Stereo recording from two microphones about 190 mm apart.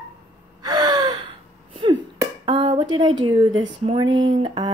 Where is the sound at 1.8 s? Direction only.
25° right (ahead or behind).